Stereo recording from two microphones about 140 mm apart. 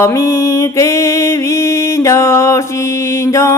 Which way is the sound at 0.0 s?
20° left (ahead or behind).